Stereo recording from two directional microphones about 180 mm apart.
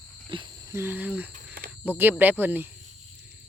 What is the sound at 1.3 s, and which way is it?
Cricket, 50° right (ahead or behind).